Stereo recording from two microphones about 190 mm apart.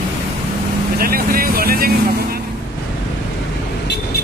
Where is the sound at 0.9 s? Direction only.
50° right (ahead or behind).